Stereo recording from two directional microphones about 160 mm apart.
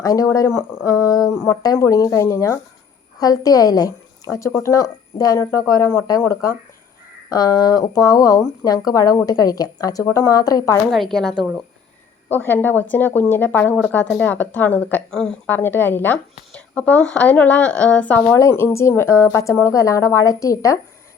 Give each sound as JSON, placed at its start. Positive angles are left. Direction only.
{"t": 0.0, "sound": "speech", "side_deg": 20}
{"t": 10.9, "sound": "a woman's voice", "side_deg": 0}
{"t": 12.3, "sound": "speech", "side_deg": 15}